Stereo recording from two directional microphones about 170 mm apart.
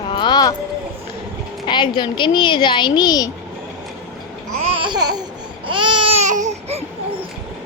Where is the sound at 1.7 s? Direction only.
25° left (ahead or behind).